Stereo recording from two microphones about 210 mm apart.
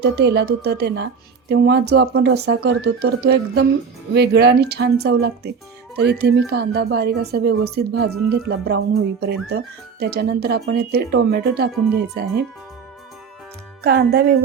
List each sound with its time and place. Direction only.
0.0 s speech: 50° right (ahead or behind)
13.8 s speech: 50° right (ahead or behind)